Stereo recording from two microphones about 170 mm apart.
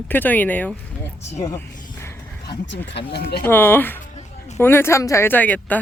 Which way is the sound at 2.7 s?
80° left.